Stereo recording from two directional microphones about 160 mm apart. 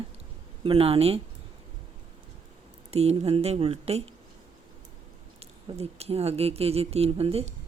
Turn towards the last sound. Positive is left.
turn(degrees=-40)  # may be behind; listen again after turning